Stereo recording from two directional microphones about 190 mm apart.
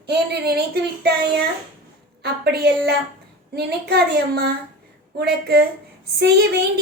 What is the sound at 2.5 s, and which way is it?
A woman's voice, 60° right (ahead or behind).